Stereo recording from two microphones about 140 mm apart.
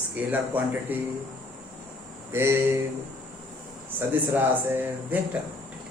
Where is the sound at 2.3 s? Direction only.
15° right (ahead or behind).